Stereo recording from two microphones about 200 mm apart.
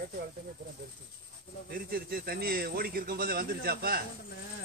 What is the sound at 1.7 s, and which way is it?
A man's voice, 45° right (ahead or behind).